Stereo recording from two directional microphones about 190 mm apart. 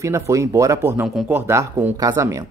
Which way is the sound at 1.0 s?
5° right (ahead or behind).